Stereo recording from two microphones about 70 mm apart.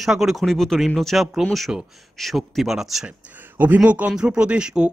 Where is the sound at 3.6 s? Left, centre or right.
Right.